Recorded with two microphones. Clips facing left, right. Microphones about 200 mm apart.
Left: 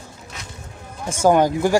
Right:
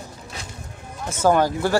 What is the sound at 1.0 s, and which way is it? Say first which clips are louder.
Speech: left 3 dB; 15° left (ahead or behind).